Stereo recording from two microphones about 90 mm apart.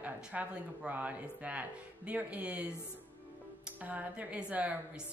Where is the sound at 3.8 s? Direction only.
15° right (ahead or behind).